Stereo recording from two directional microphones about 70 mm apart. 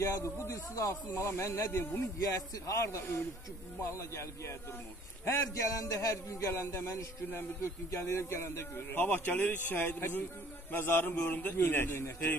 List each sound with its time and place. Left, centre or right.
0.0 s speech: left
2.3 s speech: left
5.4 s a man's voice: left